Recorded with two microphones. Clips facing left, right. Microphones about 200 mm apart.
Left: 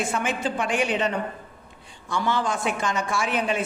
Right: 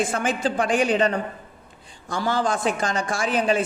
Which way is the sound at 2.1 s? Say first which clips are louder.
Right 2 dB; 35° right (ahead or behind).